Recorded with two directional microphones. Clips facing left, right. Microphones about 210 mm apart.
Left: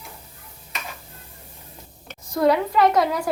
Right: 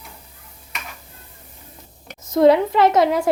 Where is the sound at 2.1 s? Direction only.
20° right (ahead or behind).